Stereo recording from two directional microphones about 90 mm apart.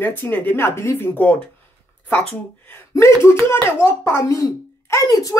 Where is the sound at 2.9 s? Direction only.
30° left (ahead or behind).